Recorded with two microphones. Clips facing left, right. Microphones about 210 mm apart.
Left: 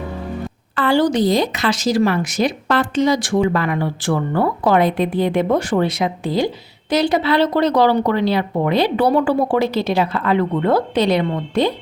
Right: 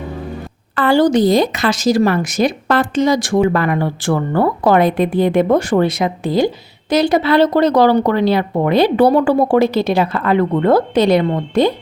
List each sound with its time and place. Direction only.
0.8 s speech: 45° right (ahead or behind)